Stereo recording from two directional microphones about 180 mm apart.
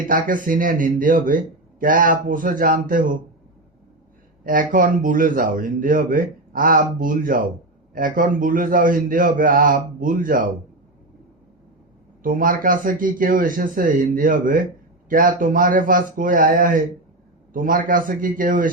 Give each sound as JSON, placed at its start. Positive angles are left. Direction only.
{"t": 0.1, "sound": "speech", "side_deg": -50}
{"t": 4.4, "sound": "speech", "side_deg": -50}
{"t": 12.2, "sound": "speech", "side_deg": -50}